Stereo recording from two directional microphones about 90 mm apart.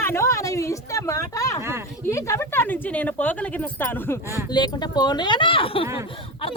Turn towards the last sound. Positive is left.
turn(degrees=90)